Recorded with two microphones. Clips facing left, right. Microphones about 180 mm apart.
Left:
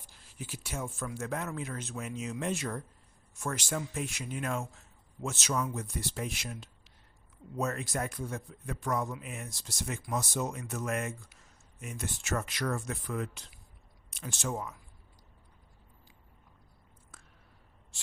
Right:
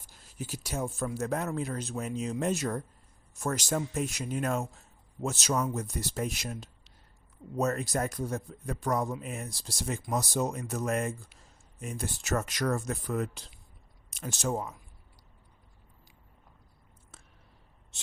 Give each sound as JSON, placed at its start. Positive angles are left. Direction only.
{"t": 0.0, "sound": "speech", "side_deg": -40}
{"t": 17.1, "sound": "a sound", "side_deg": -25}
{"t": 17.9, "sound": "speech", "side_deg": -20}